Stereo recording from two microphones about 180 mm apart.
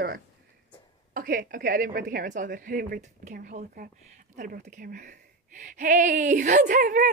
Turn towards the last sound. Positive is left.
turn(degrees=-45)  # may be behind; listen again after turning